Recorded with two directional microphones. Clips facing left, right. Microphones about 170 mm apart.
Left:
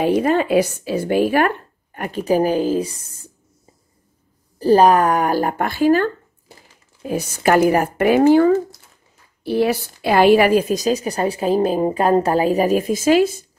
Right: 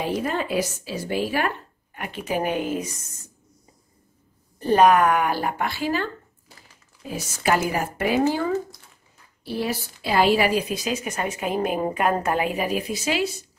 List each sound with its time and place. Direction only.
0.0 s a woman's voice: 65° left (ahead or behind); by 3.3 s 30° left (ahead or behind)
4.6 s a woman's voice: 35° left (ahead or behind); by 6.0 s 50° left (ahead or behind)
7.1 s a woman's voice: 55° left (ahead or behind)